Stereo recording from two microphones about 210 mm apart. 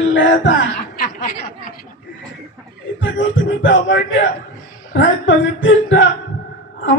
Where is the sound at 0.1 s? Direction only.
65° left (ahead or behind).